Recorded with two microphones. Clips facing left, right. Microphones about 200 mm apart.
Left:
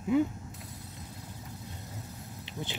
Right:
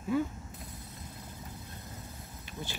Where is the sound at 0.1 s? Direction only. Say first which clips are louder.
Left 4 dB; 20° left (ahead or behind).